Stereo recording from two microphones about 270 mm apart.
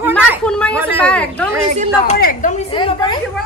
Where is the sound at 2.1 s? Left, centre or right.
Left.